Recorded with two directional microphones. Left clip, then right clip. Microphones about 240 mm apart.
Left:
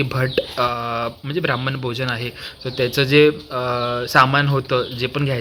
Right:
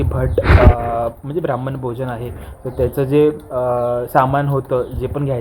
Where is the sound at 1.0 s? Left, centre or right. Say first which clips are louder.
Right 3 dB; left.